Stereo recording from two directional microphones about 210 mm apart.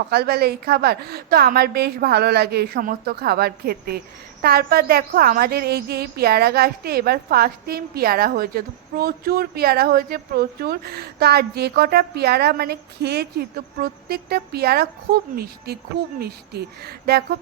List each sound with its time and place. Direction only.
0.1 s a woman's voice: 50° right (ahead or behind)